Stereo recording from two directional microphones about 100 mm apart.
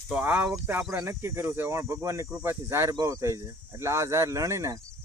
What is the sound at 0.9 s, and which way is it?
Speech, 30° right (ahead or behind).